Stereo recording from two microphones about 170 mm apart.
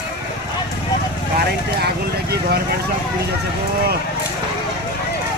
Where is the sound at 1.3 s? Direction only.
70° right (ahead or behind).